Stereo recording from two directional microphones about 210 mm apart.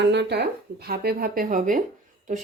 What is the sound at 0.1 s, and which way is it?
Speech, 50° right (ahead or behind).